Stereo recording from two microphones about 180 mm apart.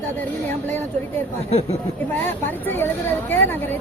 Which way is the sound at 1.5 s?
35° left (ahead or behind).